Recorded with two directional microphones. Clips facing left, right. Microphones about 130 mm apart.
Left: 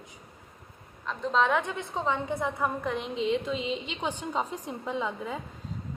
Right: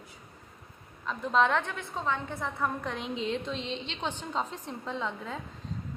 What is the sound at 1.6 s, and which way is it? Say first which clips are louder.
A woman's voice: left 3 dB; 20° left (ahead or behind).